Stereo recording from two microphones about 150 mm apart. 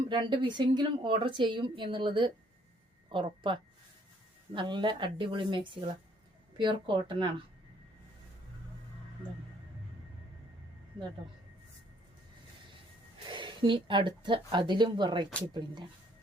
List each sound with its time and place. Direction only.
0.1 s a woman's voice: 30° right (ahead or behind)
13.2 s a woman's voice: 30° right (ahead or behind)